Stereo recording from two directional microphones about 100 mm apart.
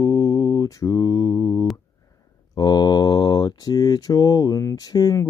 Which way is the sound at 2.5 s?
45° left (ahead or behind).